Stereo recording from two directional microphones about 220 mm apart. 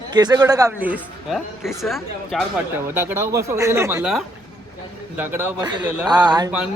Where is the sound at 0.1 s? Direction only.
20° right (ahead or behind).